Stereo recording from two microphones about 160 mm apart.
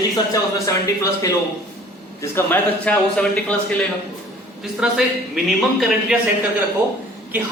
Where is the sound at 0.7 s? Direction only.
20° left (ahead or behind).